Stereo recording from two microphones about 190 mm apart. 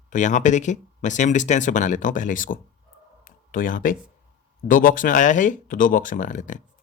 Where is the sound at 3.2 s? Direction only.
45° left (ahead or behind).